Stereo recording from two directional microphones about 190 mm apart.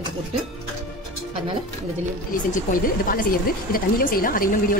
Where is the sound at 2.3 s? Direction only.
45° left (ahead or behind).